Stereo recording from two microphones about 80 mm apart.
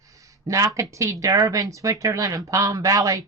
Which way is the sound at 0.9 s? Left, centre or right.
Right.